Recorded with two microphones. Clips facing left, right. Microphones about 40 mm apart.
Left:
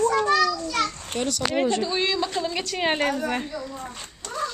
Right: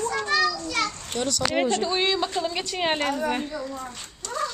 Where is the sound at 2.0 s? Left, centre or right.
Right.